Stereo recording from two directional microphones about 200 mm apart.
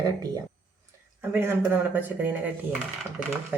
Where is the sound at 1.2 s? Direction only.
10° right (ahead or behind).